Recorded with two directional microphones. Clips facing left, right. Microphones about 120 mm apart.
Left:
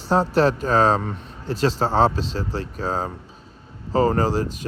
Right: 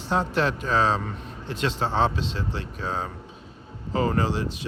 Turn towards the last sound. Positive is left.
turn(degrees=40)  # may be behind; listen again after turning